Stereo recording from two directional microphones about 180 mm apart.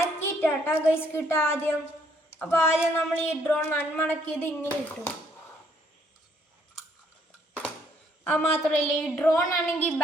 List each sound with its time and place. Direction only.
0.0 s a child's voice: 10° left (ahead or behind)
8.2 s a woman's voice: 10° left (ahead or behind)